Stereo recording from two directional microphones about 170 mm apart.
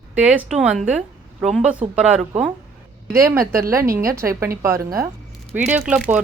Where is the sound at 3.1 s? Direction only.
15° right (ahead or behind).